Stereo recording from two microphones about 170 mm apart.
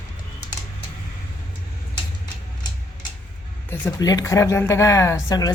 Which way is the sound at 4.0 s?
20° left (ahead or behind).